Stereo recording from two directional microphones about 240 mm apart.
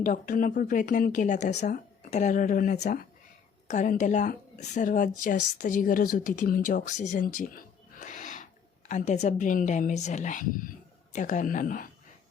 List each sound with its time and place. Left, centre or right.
0.0 s speech: left